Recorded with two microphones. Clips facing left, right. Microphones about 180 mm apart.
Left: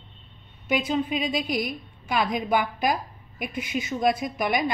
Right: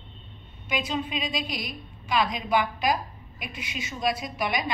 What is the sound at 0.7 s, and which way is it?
A woman's voice, 50° left (ahead or behind).